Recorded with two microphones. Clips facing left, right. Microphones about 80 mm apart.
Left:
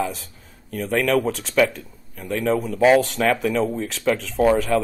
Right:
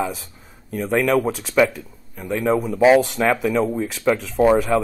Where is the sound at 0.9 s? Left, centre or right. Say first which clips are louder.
Right 1 dB; centre.